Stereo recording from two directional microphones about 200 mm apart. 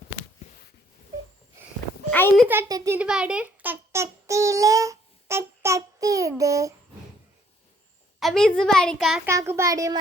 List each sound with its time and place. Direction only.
2.1 s a child's voice: 5° left (ahead or behind)
2.5 s a child's voice: 15° right (ahead or behind)
8.2 s a woman's voice: centre (ahead or behind)
9.2 s speech: 15° right (ahead or behind)